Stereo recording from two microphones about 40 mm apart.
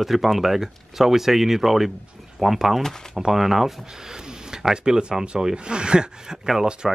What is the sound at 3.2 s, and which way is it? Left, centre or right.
Speech, centre.